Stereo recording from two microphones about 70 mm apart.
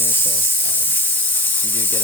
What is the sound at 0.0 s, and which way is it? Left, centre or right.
Sizzle, left.